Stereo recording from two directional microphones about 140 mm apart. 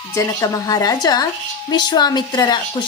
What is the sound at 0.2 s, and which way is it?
A woman's voice, 25° left (ahead or behind).